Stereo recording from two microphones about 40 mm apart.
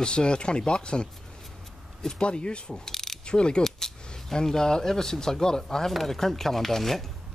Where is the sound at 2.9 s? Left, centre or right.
Centre.